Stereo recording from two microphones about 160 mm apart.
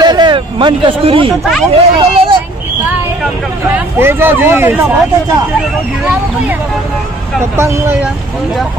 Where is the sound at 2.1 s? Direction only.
35° right (ahead or behind).